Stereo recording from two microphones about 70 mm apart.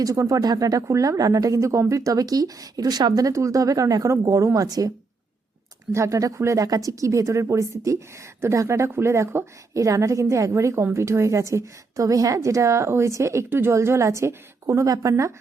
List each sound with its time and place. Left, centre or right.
0.0 s speech: right
5.9 s speech: right